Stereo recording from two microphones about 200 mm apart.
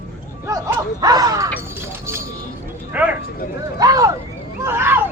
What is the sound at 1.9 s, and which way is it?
Music, 10° right (ahead or behind).